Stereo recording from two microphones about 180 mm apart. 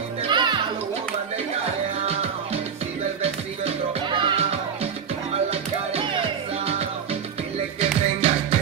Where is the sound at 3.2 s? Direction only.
30° right (ahead or behind).